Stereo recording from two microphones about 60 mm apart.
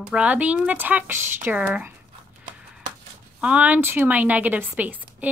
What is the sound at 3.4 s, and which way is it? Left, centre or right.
Speech, right.